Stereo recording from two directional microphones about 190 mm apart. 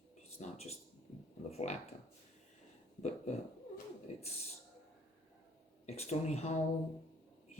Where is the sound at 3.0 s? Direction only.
35° left (ahead or behind).